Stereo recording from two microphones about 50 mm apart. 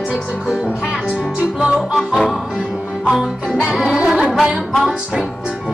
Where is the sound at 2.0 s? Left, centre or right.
Centre.